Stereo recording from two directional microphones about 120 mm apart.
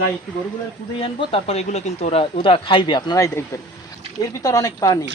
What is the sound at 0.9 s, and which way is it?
Speech, 45° left (ahead or behind).